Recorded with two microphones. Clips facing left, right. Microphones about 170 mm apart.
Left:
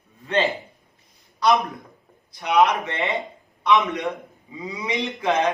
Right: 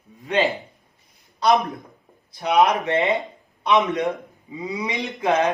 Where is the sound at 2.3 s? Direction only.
20° right (ahead or behind).